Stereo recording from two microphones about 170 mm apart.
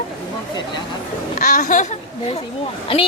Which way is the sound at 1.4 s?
50° left (ahead or behind).